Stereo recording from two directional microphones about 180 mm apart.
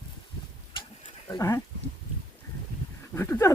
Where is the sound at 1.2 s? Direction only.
15° left (ahead or behind).